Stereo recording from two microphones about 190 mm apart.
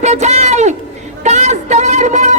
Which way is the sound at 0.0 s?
35° right (ahead or behind).